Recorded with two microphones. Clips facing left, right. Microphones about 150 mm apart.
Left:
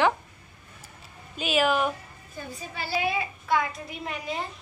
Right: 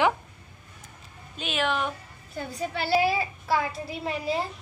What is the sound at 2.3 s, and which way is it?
Speech, 70° right (ahead or behind).